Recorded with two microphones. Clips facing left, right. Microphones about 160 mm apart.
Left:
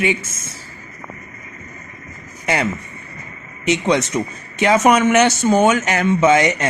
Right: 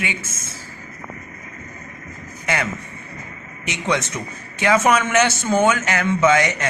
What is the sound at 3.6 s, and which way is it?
A man's voice, 20° left (ahead or behind).